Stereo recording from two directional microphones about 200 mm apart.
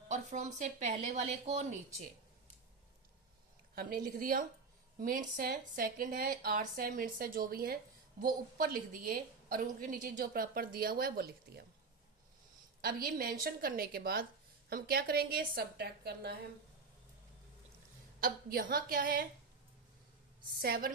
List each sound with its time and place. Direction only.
0.1 s speech: 35° right (ahead or behind)
3.8 s a woman's voice: 45° right (ahead or behind)
12.8 s a woman's voice: 45° right (ahead or behind)
18.2 s a woman's voice: 45° right (ahead or behind)
20.6 s a woman's voice: 50° right (ahead or behind)